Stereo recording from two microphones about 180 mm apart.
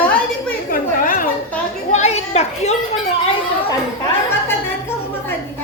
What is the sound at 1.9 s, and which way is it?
Speech, 40° left (ahead or behind).